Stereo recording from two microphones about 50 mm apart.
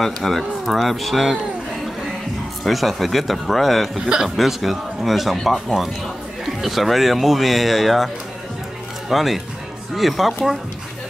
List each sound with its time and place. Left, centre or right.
0.0 s speech: centre
2.6 s speech: centre
4.0 s a man's voice: centre
4.4 s speech: centre
9.1 s speech: centre